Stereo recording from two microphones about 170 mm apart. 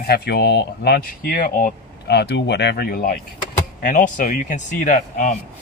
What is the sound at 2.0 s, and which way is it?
A man's voice, 75° left (ahead or behind).